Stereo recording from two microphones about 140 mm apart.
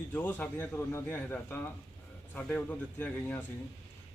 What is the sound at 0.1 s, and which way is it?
Speech, 15° left (ahead or behind).